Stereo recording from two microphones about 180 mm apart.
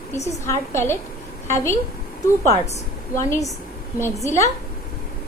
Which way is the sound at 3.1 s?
15° left (ahead or behind).